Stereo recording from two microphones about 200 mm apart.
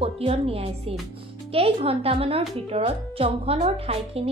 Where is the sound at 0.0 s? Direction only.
30° right (ahead or behind).